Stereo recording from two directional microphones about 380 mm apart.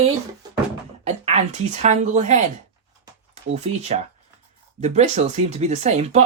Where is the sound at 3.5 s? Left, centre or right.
Centre.